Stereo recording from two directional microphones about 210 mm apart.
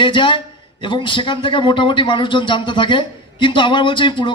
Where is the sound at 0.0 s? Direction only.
25° left (ahead or behind).